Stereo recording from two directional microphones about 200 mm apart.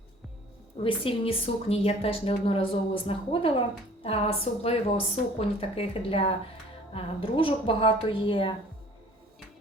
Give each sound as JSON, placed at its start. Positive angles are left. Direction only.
{"t": 0.8, "sound": "speech", "side_deg": 25}